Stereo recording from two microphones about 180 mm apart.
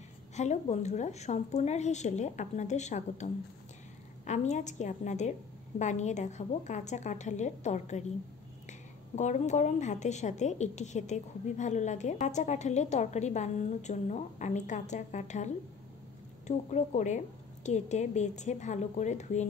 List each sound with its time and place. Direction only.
0.4 s speech: 40° left (ahead or behind)
4.3 s speech: 40° left (ahead or behind)